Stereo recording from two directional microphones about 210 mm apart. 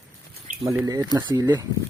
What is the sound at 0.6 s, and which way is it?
Speech, 15° right (ahead or behind).